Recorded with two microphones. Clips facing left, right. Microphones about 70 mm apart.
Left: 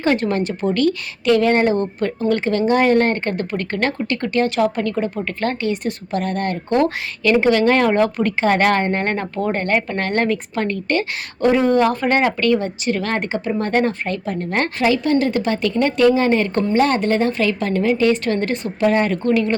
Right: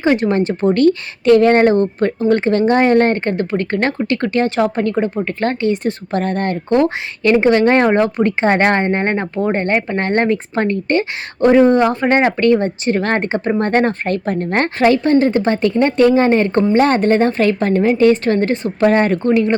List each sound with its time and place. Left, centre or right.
0.0 s speech: centre
18.8 s speech: right
19.3 s speech: right